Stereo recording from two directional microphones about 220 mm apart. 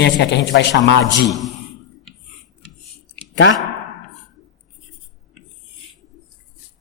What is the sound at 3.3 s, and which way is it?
Speech, 55° left (ahead or behind).